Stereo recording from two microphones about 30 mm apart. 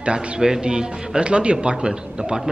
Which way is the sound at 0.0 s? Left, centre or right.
Right.